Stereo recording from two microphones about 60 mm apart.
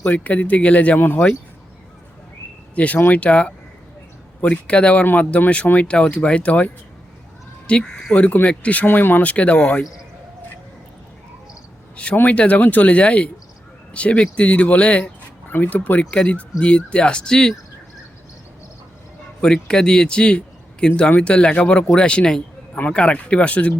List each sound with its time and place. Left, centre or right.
0.0 s speech: left
2.7 s speech: left
7.7 s speech: left
9.3 s speech: left
12.1 s speech: left
15.4 s speech: left; by 17.5 s centre
19.4 s speech: centre